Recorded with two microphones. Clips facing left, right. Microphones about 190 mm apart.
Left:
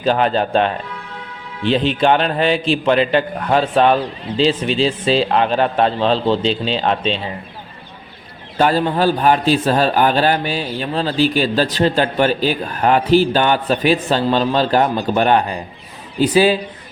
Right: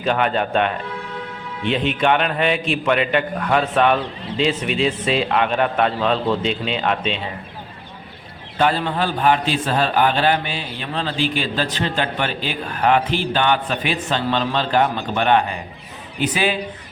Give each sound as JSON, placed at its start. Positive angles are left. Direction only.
{"t": 0.0, "sound": "a man's voice", "side_deg": 30}
{"t": 8.5, "sound": "a man's voice", "side_deg": 40}